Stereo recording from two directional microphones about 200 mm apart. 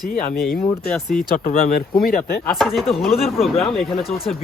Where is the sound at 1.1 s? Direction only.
40° left (ahead or behind).